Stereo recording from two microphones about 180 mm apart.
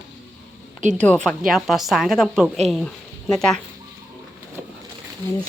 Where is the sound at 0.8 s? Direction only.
40° right (ahead or behind).